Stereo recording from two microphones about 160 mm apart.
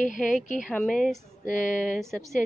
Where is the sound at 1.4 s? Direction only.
55° left (ahead or behind).